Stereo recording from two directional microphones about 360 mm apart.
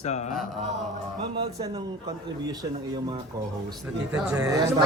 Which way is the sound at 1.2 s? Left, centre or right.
Centre.